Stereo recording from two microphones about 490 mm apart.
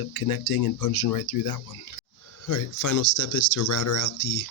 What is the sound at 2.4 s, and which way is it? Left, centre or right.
Speech, left.